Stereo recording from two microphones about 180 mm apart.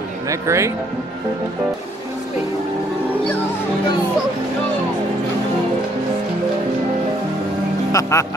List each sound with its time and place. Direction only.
0.3 s speech: 15° right (ahead or behind)
7.9 s speech: 15° left (ahead or behind)